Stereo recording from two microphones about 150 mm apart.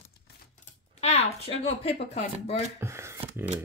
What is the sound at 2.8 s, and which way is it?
Speech, 20° right (ahead or behind).